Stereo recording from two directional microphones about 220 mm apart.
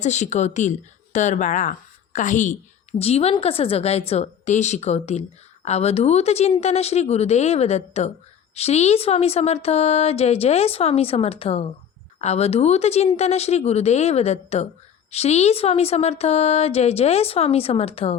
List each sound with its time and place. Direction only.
0.0 s a woman's voice: 30° left (ahead or behind)